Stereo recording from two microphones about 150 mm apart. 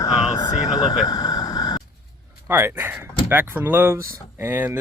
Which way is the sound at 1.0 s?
25° left (ahead or behind).